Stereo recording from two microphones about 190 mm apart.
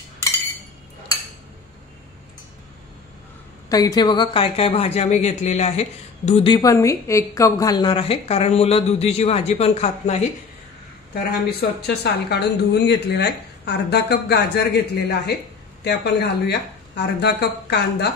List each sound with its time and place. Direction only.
3.6 s speech: 20° left (ahead or behind)
11.8 s speech: 60° left (ahead or behind)